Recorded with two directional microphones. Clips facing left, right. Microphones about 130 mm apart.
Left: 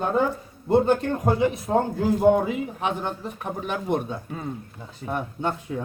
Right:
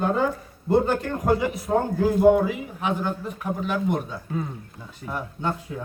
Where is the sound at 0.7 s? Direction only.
20° left (ahead or behind).